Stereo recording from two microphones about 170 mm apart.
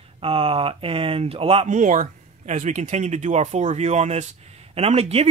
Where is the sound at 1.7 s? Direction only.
50° right (ahead or behind).